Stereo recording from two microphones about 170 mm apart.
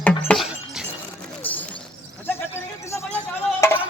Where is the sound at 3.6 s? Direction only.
10° left (ahead or behind).